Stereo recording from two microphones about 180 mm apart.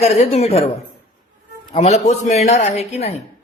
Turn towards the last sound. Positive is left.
turn(degrees=35)  # may be behind; listen again after turning